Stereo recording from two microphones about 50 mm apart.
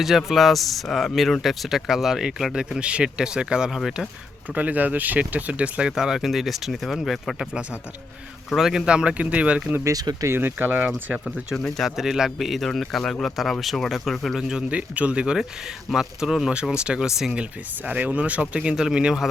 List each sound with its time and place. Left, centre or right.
0.0 s speech: centre
4.5 s speech: right
5.9 s speech: centre
8.4 s speech: centre
8.9 s speech: centre
9.8 s speech: right
10.7 s speech: right
11.5 s speech: centre
11.9 s speech: centre
14.3 s speech: centre
14.7 s speech: right
18.6 s speech: centre